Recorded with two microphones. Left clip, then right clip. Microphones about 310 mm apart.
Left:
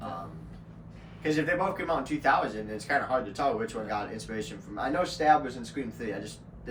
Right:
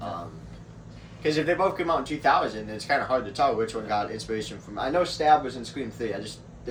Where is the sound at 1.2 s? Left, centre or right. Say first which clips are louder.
Right 4 dB; centre.